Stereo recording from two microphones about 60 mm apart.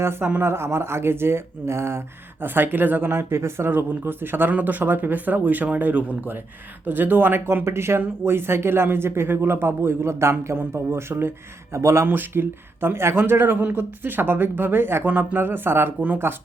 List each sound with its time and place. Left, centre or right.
0.0 s speech: right
2.4 s speech: right
7.4 s speech: right
12.0 s speech: right